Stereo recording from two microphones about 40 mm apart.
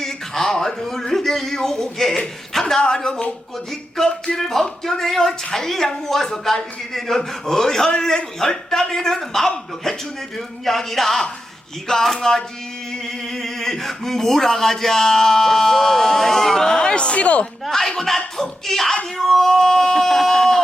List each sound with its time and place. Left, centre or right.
0.0 s speech: centre
3.7 s speech: centre; by 17.4 s left
17.7 s speech: centre